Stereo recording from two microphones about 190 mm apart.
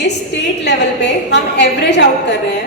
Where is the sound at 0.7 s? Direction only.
65° left (ahead or behind).